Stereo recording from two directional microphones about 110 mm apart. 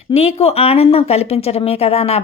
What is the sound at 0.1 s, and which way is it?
Speech, 70° left (ahead or behind).